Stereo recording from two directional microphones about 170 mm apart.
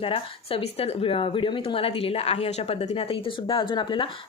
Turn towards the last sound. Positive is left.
turn(degrees=30)  # may be behind; listen again after turning